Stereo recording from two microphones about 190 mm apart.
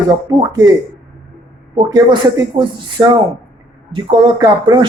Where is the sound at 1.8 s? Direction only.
20° right (ahead or behind).